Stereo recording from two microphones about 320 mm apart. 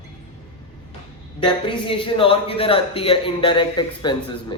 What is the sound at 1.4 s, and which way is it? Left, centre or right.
A man's voice, centre.